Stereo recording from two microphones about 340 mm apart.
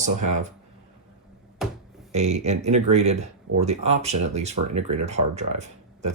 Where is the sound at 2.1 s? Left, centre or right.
Centre.